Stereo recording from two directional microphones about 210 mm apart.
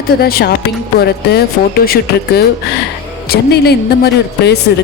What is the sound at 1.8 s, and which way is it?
Speech, 45° left (ahead or behind).